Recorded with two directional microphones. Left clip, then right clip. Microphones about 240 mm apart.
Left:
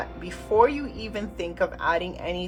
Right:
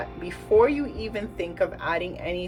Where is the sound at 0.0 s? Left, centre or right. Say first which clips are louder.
Even; centre.